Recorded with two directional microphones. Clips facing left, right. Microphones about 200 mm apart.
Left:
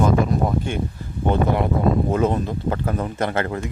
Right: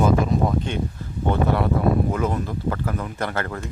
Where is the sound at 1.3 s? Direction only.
20° left (ahead or behind).